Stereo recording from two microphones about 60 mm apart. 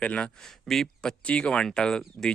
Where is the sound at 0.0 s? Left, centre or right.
Left.